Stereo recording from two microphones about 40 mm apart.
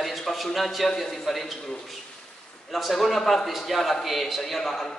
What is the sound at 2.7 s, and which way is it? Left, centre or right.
A man's voice, centre.